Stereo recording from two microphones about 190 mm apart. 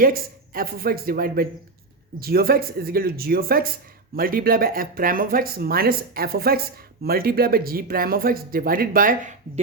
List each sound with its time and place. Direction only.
0.0 s speech: 50° right (ahead or behind)